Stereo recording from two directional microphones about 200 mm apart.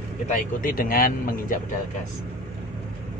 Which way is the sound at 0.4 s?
45° left (ahead or behind).